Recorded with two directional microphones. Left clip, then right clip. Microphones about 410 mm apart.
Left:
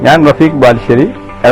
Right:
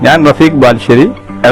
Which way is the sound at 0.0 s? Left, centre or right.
Right.